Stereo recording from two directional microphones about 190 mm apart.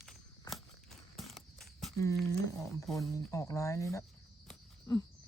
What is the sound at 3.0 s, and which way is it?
Speech, 15° left (ahead or behind).